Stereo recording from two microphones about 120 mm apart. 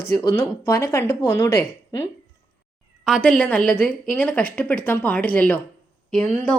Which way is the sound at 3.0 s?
5° left (ahead or behind).